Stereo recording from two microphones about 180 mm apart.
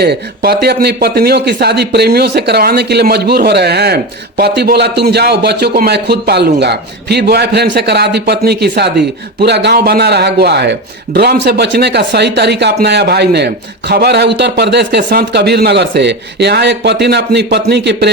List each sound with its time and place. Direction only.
0.0 s speech: 65° right (ahead or behind)